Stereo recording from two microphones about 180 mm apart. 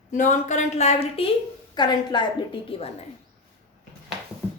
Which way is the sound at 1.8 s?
25° left (ahead or behind).